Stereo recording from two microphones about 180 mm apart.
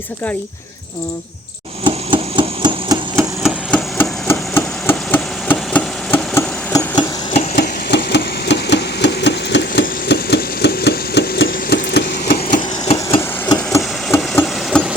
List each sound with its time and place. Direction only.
1.8 s hammer: 25° right (ahead or behind)
3.4 s hammer: 5° left (ahead or behind)
7.5 s engine: 65° left (ahead or behind)
12.9 s hammer: 30° left (ahead or behind)
13.7 s hammer: 15° left (ahead or behind)